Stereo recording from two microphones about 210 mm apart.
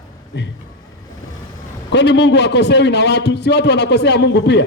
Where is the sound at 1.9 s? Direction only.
55° left (ahead or behind).